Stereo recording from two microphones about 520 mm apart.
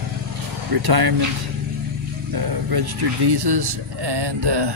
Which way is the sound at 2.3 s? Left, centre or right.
Right.